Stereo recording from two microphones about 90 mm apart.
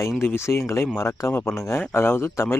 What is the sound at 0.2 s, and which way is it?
Speech, 30° left (ahead or behind).